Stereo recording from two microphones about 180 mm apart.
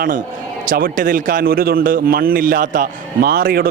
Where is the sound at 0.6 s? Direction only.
50° right (ahead or behind).